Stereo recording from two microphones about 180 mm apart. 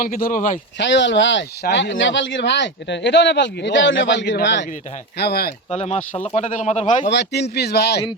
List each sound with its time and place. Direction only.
0.0 s a man's voice: 50° left (ahead or behind)
0.8 s speech: 90° left
1.6 s speech: 80° left
5.1 s speech: 60° left (ahead or behind)
5.7 s speech: 35° left (ahead or behind)
7.1 s speech: 70° left (ahead or behind)